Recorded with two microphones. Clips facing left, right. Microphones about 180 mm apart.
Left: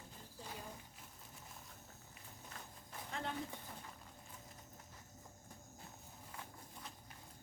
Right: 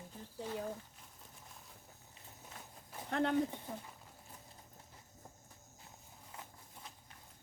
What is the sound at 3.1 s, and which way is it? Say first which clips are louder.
Speech: right 11 dB; 65° right (ahead or behind).